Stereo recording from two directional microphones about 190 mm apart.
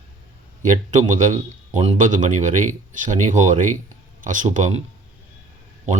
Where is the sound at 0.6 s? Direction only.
40° right (ahead or behind).